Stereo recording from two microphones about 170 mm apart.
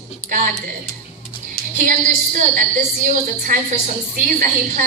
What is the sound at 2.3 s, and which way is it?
A woman's voice, 45° right (ahead or behind).